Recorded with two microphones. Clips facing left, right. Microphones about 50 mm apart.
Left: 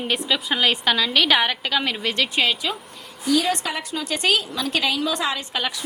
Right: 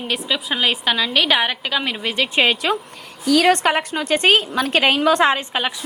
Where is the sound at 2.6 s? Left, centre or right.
Right.